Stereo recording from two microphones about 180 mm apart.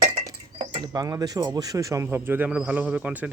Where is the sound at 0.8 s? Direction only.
20° right (ahead or behind).